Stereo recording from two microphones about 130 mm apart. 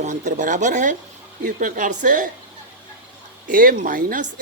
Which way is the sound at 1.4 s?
85° right.